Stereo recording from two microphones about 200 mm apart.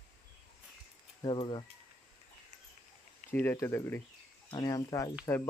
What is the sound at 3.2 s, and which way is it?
Speech, 10° left (ahead or behind).